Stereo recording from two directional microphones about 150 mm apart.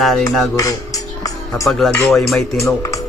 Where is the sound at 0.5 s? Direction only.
20° left (ahead or behind).